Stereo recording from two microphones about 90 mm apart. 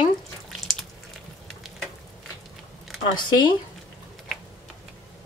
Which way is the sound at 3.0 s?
60° left (ahead or behind).